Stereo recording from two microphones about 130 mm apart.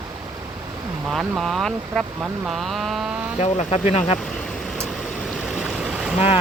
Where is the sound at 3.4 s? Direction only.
60° left (ahead or behind).